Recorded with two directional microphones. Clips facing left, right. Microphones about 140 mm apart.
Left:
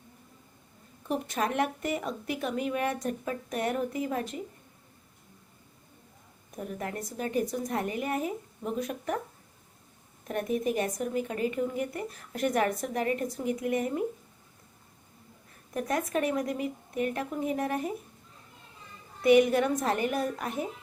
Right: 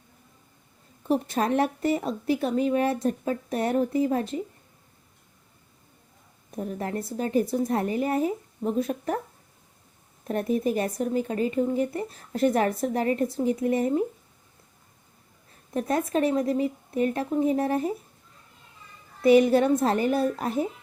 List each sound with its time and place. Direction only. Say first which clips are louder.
1.0 s speech: right 6 dB; 35° right (ahead or behind)
6.6 s speech: right 5 dB; 30° right (ahead or behind)
10.2 s speech: right 4 dB; 35° right (ahead or behind)
15.7 s speech: right 4 dB; 30° right (ahead or behind)
19.2 s speech: right 4 dB; 30° right (ahead or behind)